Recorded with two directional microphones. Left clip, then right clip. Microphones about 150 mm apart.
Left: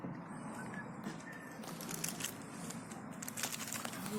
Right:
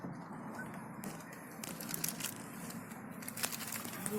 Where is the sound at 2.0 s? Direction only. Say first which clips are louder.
Right 1 dB; 25° right (ahead or behind).